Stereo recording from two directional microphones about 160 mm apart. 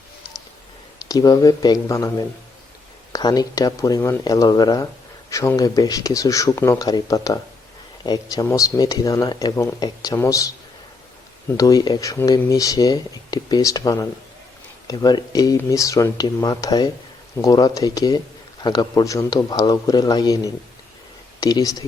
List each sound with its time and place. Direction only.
1.0 s speech: 25° left (ahead or behind)
11.5 s speech: 20° left (ahead or behind)